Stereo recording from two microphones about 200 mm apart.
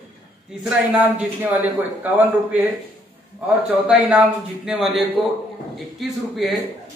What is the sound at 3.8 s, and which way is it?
Speech, 5° right (ahead or behind).